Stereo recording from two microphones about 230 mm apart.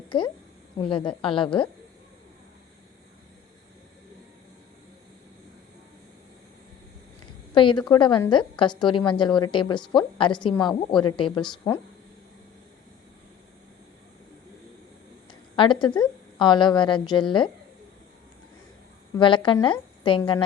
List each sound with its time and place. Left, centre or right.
0.8 s a woman's voice: left
7.5 s a woman's voice: left
15.3 s a woman's voice: left
19.1 s a woman's voice: left